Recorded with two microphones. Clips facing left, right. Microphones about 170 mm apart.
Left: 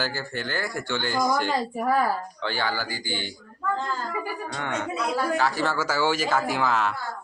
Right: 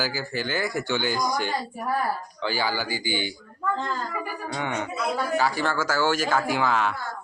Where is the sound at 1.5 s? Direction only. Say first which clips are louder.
Left 4 dB; 90° left.